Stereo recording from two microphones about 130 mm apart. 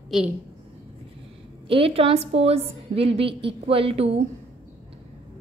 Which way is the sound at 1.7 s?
45° right (ahead or behind).